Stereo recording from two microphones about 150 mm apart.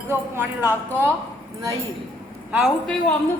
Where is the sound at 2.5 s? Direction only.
Centre (ahead or behind).